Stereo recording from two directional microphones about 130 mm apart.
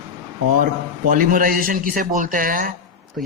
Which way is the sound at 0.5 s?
90° right.